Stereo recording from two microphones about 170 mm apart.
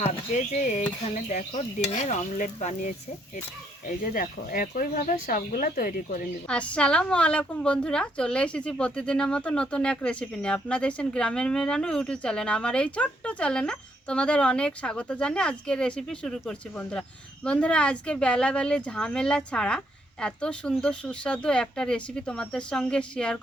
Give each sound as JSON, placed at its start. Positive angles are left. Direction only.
{"t": 0.0, "sound": "speech", "side_deg": 45}
{"t": 6.5, "sound": "a woman's voice", "side_deg": 5}